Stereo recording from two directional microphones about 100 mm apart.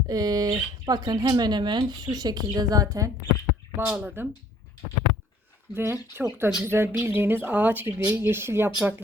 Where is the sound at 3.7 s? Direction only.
20° right (ahead or behind).